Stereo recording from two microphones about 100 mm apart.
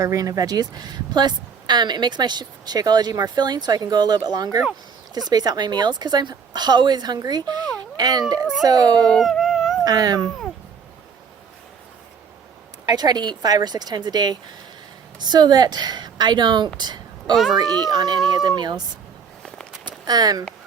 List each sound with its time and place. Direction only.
0.0 s a child's voice: 35° right (ahead or behind)
9.0 s dog: 5° left (ahead or behind)
9.8 s speech: 40° right (ahead or behind)
12.8 s a woman's voice: 40° right (ahead or behind)
17.3 s a child's voice: centre (ahead or behind)
17.6 s speech: 40° right (ahead or behind)
19.8 s a sound: 40° right (ahead or behind)